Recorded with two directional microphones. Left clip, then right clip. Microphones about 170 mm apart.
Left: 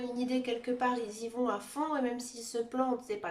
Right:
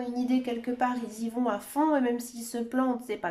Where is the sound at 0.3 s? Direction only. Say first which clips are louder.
Right 2 dB; 40° right (ahead or behind).